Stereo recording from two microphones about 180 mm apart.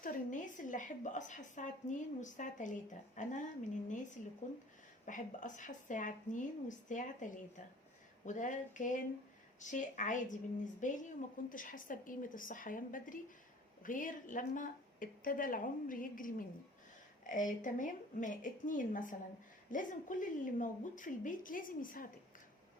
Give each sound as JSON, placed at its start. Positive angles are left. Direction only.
{"t": 0.0, "sound": "a woman's voice", "side_deg": 45}
{"t": 5.0, "sound": "a woman's voice", "side_deg": 45}